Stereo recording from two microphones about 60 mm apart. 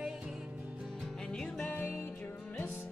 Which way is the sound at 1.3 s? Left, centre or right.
Centre.